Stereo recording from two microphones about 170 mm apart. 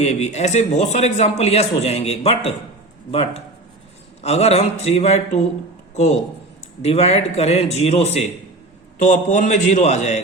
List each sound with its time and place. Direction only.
0.0 s a man's voice: 45° left (ahead or behind)
6.8 s a man's voice: 40° left (ahead or behind)